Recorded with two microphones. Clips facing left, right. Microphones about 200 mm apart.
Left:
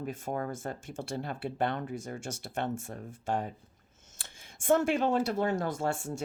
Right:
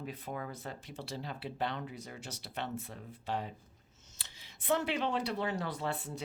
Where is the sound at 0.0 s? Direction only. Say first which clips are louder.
Left 6 dB; 45° left (ahead or behind).